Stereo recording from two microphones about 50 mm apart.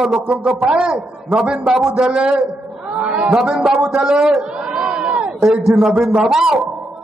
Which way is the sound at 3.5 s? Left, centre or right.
Right.